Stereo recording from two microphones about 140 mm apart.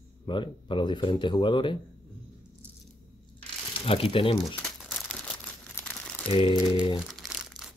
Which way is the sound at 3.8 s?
40° left (ahead or behind).